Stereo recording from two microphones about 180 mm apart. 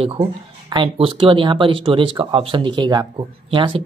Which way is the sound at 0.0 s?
30° right (ahead or behind).